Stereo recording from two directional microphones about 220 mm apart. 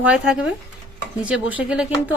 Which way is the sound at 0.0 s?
5° right (ahead or behind).